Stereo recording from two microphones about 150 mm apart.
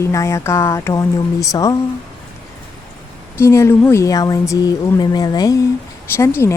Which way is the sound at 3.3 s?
20° left (ahead or behind).